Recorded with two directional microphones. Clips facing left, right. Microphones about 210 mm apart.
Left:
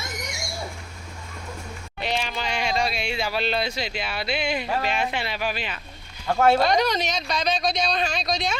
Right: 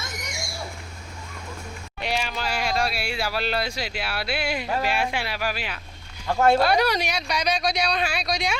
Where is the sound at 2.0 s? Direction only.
5° right (ahead or behind).